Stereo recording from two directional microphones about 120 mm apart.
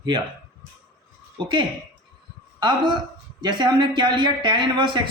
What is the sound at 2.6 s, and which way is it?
Speech, 40° right (ahead or behind).